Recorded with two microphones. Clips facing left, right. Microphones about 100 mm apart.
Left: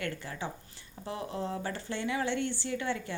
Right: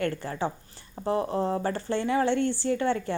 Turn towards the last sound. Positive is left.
turn(degrees=-45)  # may be behind; listen again after turning